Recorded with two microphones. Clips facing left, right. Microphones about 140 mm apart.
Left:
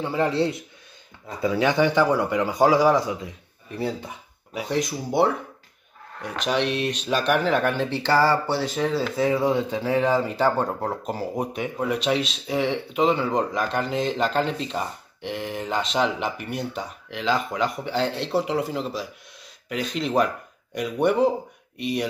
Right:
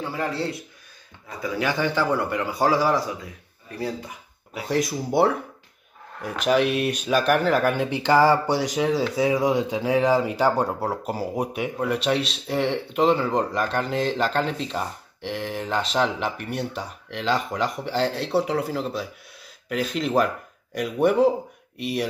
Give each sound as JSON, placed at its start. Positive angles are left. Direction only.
{"t": 0.0, "sound": "a man's voice", "side_deg": 20}
{"t": 4.6, "sound": "speech", "side_deg": 0}